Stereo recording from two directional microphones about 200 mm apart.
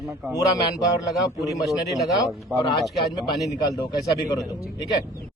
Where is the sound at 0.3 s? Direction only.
15° left (ahead or behind).